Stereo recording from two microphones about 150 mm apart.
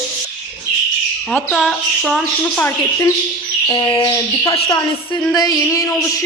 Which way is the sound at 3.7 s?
25° left (ahead or behind).